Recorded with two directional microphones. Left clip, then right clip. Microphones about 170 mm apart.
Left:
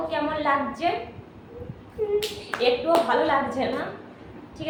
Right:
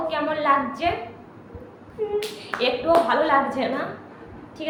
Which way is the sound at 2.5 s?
15° left (ahead or behind).